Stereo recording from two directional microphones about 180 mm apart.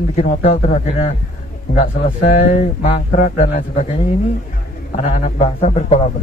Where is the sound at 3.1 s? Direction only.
50° left (ahead or behind).